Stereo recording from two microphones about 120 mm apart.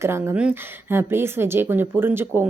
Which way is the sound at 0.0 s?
20° right (ahead or behind).